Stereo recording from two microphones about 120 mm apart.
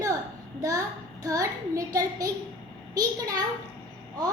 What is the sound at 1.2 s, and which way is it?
A woman's voice, 25° right (ahead or behind).